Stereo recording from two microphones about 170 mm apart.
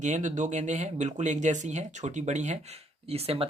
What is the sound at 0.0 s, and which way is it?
Speech, 45° right (ahead or behind).